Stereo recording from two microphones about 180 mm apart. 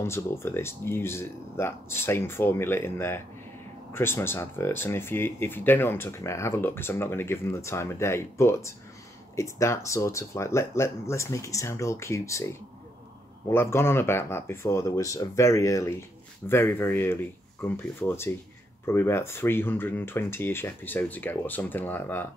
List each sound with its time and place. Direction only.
0.0 s speech: 15° left (ahead or behind)